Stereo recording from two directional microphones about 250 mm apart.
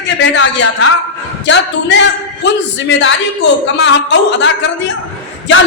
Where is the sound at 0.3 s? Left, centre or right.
Left.